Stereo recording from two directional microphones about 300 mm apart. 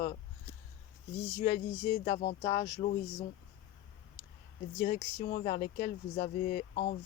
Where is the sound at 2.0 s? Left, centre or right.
Left.